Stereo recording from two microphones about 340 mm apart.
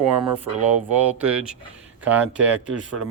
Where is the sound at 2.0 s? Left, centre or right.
Centre.